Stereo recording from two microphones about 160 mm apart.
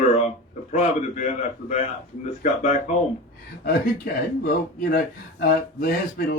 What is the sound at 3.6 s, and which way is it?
Speech, 70° left (ahead or behind).